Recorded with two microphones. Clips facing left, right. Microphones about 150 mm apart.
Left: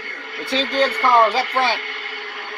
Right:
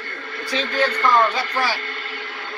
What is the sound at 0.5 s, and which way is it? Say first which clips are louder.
Speech: left 3 dB; 30° left (ahead or behind).